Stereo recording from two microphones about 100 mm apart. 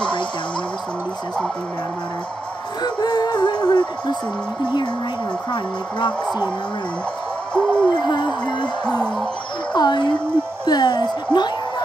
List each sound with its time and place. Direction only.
2.8 s music: 45° left (ahead or behind)
5.5 s a woman's voice: 50° left (ahead or behind)
7.5 s a sound: 10° left (ahead or behind)
7.9 s a woman's voice: 50° left (ahead or behind)
9.8 s a woman's voice: 50° left (ahead or behind)